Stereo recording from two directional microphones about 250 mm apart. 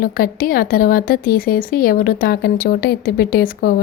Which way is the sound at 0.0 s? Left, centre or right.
Left.